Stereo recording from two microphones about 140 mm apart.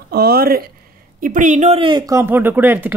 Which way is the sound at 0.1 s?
90° right.